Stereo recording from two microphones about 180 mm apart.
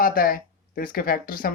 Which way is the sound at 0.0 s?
50° left (ahead or behind).